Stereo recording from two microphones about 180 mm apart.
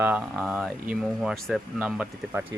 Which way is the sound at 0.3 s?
5° right (ahead or behind).